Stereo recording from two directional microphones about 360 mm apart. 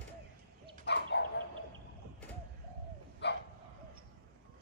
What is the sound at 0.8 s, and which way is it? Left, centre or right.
Dog, left.